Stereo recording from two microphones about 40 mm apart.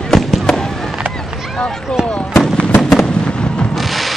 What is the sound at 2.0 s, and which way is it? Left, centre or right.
Fireworks, left.